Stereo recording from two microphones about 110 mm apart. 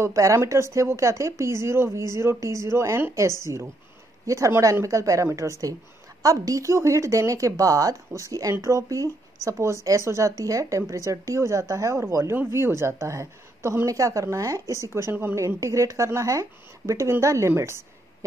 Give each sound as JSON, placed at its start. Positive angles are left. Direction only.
{"t": 0.0, "sound": "a woman's voice", "side_deg": -30}